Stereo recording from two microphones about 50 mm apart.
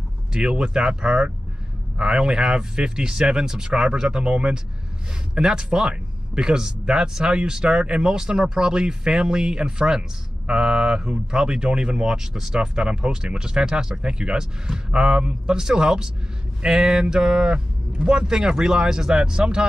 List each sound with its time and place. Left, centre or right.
0.3 s speech: centre